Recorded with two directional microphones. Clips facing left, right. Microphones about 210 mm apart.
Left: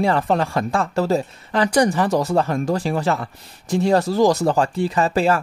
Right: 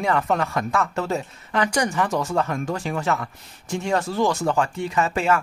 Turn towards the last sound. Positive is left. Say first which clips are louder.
# left 3 dB
turn(degrees=35)  # may be behind; listen again after turning